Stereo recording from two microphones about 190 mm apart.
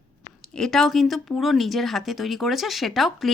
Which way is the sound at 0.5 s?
Centre (ahead or behind).